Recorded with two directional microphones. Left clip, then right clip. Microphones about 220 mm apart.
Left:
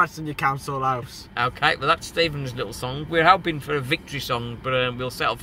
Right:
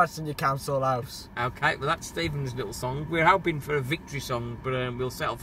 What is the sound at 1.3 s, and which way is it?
Speech, 15° left (ahead or behind).